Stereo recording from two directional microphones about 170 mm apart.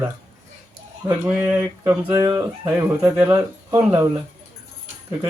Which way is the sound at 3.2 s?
20° right (ahead or behind).